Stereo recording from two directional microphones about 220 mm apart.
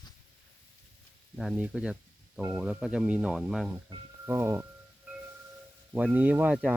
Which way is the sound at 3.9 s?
20° right (ahead or behind).